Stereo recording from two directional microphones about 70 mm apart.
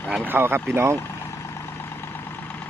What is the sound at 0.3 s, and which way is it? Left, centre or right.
Speech, right.